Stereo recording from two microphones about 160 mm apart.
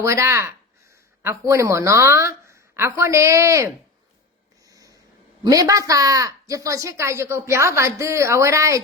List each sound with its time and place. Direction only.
0.0 s a woman's voice: 15° right (ahead or behind)
4.6 s a sound: 20° right (ahead or behind)
5.4 s a woman's voice: 20° right (ahead or behind)